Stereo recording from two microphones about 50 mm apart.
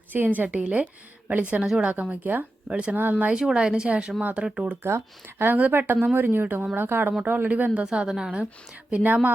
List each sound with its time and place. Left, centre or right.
0.3 s speech: right
1.6 s a woman's voice: centre
1.9 s speech: right
3.0 s speech: right
3.3 s a woman's voice: centre
4.8 s speech: right
5.5 s speech: right
7.9 s a woman's voice: centre
8.9 s speech: right